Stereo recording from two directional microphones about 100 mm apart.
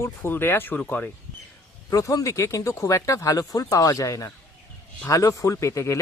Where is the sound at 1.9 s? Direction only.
35° left (ahead or behind).